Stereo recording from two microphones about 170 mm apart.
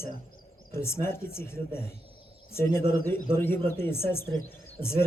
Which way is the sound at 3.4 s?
15° left (ahead or behind).